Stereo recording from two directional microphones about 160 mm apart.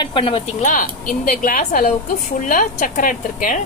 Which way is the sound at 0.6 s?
55° left (ahead or behind).